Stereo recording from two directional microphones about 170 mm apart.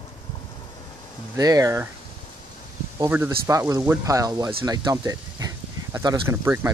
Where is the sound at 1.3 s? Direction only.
20° right (ahead or behind).